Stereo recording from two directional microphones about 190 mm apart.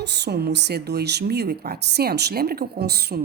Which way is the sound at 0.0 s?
65° right (ahead or behind).